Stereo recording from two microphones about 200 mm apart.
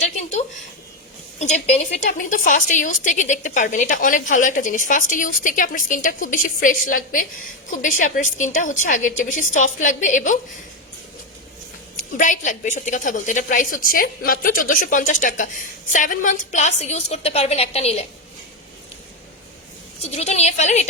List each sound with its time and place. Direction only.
0.0 s a sound: 35° left (ahead or behind)
1.4 s a woman's voice: 35° left (ahead or behind)
11.9 s a woman's voice: 40° left (ahead or behind)
20.0 s a woman's voice: 30° left (ahead or behind)